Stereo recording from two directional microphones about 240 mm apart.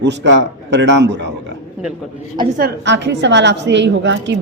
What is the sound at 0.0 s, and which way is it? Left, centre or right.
A woman's voice, right.